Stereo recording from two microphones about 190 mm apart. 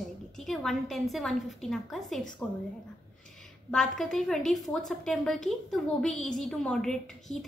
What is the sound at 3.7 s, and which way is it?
A woman's voice, centre (ahead or behind).